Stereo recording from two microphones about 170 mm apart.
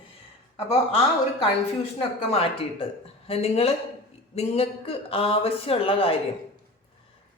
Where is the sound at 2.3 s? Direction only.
35° left (ahead or behind).